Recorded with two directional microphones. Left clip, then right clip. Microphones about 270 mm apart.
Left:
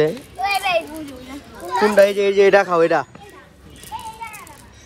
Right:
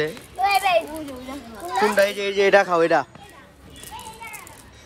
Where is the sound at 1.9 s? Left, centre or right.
Centre.